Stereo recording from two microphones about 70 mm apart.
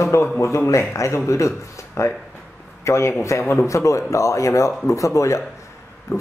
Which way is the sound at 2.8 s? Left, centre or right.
Left.